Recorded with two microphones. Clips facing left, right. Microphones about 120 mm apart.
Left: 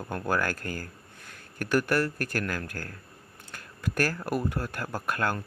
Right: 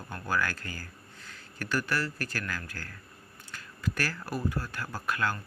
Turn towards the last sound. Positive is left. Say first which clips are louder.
# left 2 dB
turn(degrees=50)  # may be behind; listen again after turning